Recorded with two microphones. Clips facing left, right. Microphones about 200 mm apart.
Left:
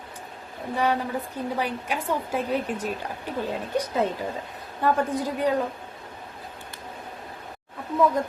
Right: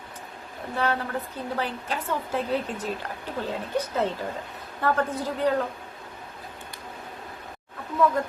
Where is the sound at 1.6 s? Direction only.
10° left (ahead or behind).